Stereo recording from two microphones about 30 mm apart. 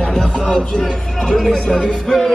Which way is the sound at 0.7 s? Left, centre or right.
Centre.